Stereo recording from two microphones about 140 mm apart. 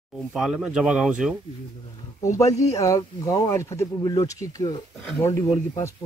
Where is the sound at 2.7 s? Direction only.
25° left (ahead or behind).